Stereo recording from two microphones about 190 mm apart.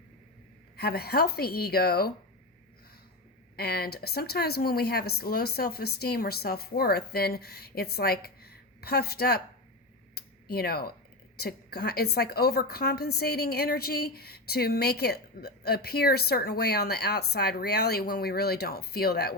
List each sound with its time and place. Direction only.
0.8 s a woman's voice: 55° left (ahead or behind)
3.5 s a woman's voice: 55° left (ahead or behind)
10.2 s a sound: 55° left (ahead or behind)
11.3 s a woman's voice: 55° left (ahead or behind)